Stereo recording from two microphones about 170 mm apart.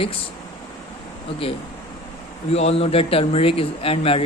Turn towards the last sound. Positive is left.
turn(degrees=35)  # may be behind; listen again after turning